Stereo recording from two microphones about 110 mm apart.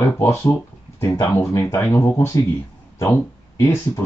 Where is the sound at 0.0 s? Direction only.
20° left (ahead or behind).